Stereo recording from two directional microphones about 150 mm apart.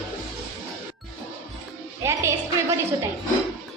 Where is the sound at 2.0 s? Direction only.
15° right (ahead or behind).